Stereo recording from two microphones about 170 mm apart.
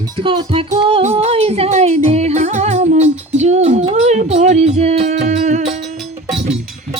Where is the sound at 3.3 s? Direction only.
40° right (ahead or behind).